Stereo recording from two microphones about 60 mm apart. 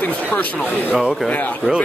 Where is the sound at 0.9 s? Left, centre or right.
Centre.